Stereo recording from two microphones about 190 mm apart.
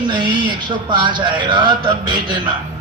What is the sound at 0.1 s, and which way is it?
A man's voice, 25° right (ahead or behind).